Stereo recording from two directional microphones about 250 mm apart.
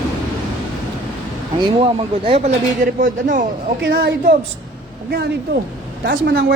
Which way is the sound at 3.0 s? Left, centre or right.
Right.